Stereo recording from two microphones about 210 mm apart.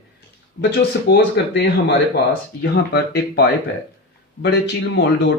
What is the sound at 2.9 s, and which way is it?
Speech, 50° left (ahead or behind).